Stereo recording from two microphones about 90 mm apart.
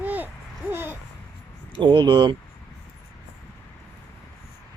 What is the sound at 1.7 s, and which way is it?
Speech, 65° right (ahead or behind).